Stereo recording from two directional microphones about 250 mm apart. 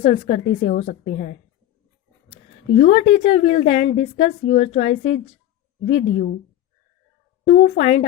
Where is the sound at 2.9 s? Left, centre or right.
Left.